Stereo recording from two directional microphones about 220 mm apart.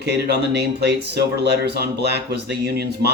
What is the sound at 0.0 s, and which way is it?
Speech, 50° right (ahead or behind).